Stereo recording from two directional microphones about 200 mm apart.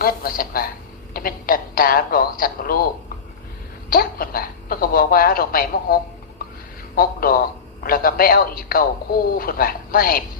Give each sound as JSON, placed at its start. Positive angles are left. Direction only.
{"t": 0.0, "sound": "speech", "side_deg": 45}
{"t": 3.8, "sound": "speech", "side_deg": 45}